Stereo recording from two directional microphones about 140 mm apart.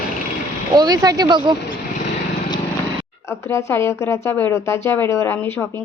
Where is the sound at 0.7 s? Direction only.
30° right (ahead or behind).